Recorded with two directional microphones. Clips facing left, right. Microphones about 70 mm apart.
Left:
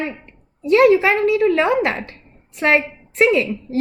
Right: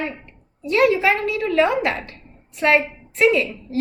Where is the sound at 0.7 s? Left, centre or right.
Left.